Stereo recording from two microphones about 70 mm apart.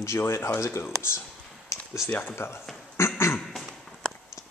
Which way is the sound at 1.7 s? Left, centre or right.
Left.